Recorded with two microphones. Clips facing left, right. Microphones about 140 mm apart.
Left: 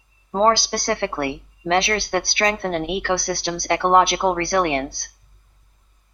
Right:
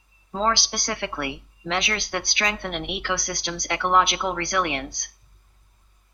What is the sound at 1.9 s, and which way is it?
Speech, 55° left (ahead or behind).